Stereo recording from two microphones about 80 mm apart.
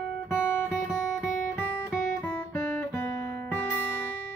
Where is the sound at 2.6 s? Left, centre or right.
Left.